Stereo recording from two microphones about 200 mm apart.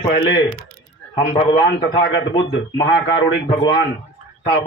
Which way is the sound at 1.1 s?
25° left (ahead or behind).